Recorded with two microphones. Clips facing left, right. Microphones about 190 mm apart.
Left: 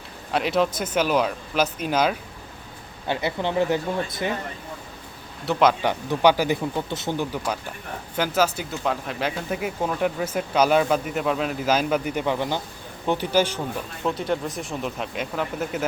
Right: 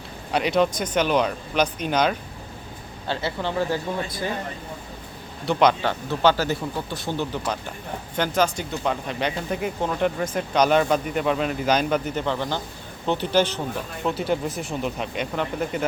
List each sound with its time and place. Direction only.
0.3 s speech: centre (ahead or behind)
3.1 s speech: 15° left (ahead or behind)
5.5 s speech: centre (ahead or behind)
5.8 s speech: 15° left (ahead or behind)
7.2 s speech: 10° left (ahead or behind)
14.0 s speech: 5° right (ahead or behind)